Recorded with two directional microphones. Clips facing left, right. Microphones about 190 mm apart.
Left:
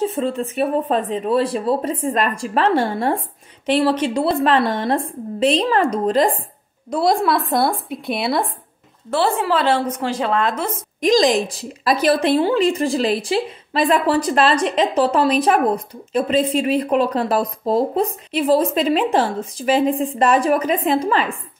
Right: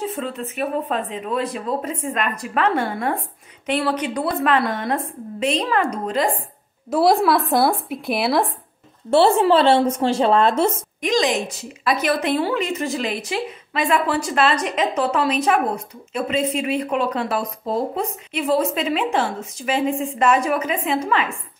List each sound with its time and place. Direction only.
0.0 s a woman's voice: 30° left (ahead or behind)
6.9 s speech: 5° right (ahead or behind)
9.1 s a woman's voice: 25° right (ahead or behind)
11.0 s a woman's voice: 35° left (ahead or behind)